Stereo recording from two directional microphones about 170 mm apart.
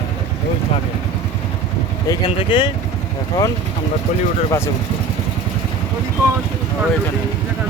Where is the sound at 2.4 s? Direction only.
30° left (ahead or behind).